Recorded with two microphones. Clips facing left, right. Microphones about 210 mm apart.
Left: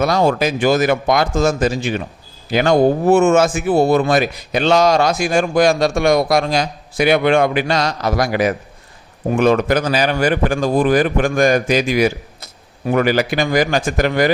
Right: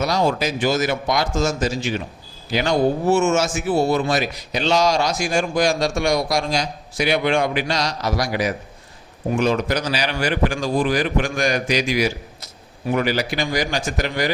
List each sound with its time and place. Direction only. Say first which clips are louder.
0.0 s a man's voice: left 5 dB; 55° left (ahead or behind)